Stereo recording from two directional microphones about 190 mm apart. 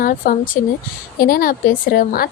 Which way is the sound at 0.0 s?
45° left (ahead or behind).